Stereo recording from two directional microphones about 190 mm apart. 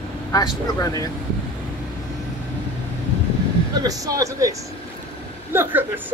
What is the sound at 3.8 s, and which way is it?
A man's voice, 20° right (ahead or behind).